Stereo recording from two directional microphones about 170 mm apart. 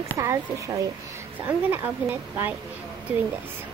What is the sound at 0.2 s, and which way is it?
A woman's voice, 20° right (ahead or behind).